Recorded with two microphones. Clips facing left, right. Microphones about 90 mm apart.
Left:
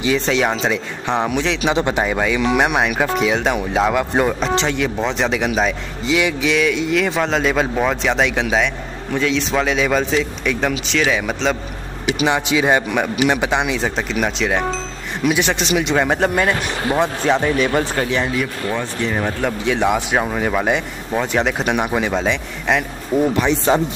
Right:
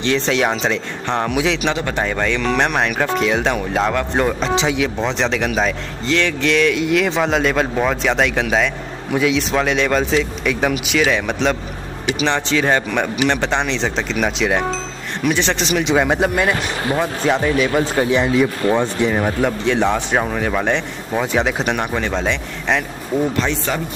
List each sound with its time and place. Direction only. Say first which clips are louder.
0.0 s speech: even; 5° left (ahead or behind)
2.0 s a man's voice: left 1 dB; 10° left (ahead or behind)
18.1 s speech: right 4 dB; 15° right (ahead or behind)
19.1 s speech: right 2 dB; 5° right (ahead or behind)
23.3 s a man's voice: left 4 dB; 15° left (ahead or behind)